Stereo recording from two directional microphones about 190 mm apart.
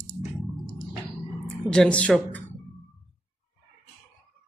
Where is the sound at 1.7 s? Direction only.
5° left (ahead or behind).